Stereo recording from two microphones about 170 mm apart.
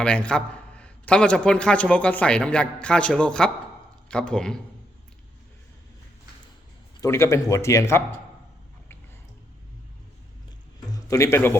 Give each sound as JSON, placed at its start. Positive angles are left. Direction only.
{"t": 0.0, "sound": "a man's voice", "side_deg": 5}
{"t": 7.0, "sound": "a man's voice", "side_deg": 15}
{"t": 10.8, "sound": "a sound", "side_deg": 20}